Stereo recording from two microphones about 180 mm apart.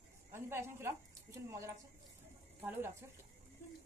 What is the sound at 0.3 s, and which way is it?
A woman's voice, 15° right (ahead or behind).